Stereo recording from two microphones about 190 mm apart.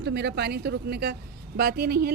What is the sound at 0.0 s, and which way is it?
A woman's voice, 60° right (ahead or behind).